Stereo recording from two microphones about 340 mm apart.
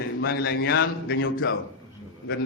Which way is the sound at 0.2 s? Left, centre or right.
Left.